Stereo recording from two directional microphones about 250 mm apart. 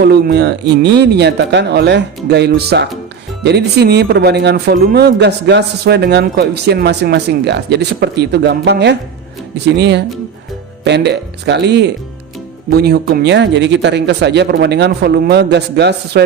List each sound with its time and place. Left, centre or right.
0.0 s speech: right